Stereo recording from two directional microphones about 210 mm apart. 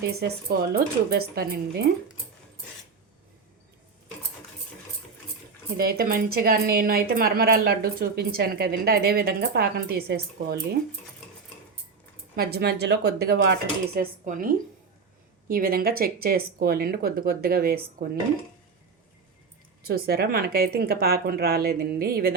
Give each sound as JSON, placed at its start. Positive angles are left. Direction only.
{"t": 0.2, "sound": "a woman's voice", "side_deg": -50}
{"t": 5.7, "sound": "a woman's voice", "side_deg": -45}
{"t": 12.4, "sound": "a woman's voice", "side_deg": -50}
{"t": 15.4, "sound": "a woman's voice", "side_deg": -45}
{"t": 19.8, "sound": "a woman's voice", "side_deg": -45}